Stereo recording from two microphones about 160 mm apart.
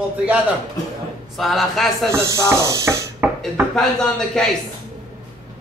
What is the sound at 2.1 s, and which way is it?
Speech, 20° right (ahead or behind).